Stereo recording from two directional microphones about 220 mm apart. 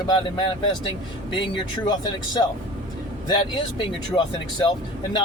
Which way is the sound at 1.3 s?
20° left (ahead or behind).